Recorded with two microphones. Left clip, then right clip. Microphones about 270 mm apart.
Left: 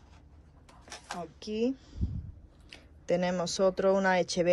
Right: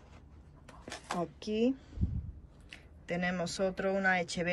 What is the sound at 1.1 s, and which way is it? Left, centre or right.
Speech, centre.